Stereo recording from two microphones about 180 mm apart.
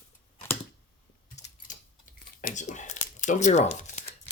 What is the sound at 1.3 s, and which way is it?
Typing, 40° left (ahead or behind).